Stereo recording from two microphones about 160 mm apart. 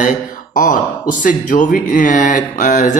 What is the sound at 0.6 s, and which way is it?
Speech, 55° left (ahead or behind).